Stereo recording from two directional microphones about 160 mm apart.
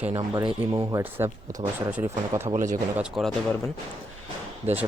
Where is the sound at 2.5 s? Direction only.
50° right (ahead or behind).